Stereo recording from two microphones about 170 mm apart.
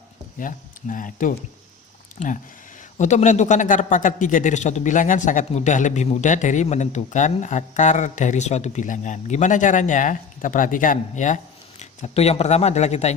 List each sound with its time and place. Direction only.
0.3 s a man's voice: 50° left (ahead or behind)